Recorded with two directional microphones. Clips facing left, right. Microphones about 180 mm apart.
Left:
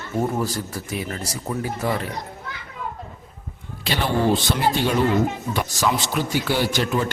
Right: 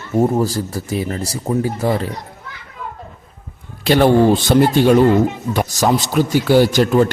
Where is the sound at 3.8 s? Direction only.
50° right (ahead or behind).